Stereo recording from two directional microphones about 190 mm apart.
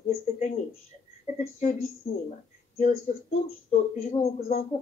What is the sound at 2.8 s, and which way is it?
Speech, 45° left (ahead or behind).